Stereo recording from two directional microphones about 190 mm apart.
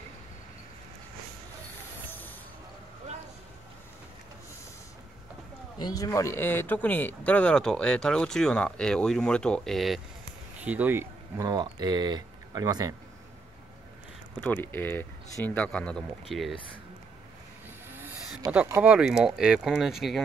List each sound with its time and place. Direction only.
2.0 s spray: 10° left (ahead or behind)
5.8 s speech: 20° left (ahead or behind); by 12.9 s 20° right (ahead or behind)
14.4 s speech: 10° left (ahead or behind)
17.9 s a sound: 10° right (ahead or behind)
18.5 s speech: 10° right (ahead or behind)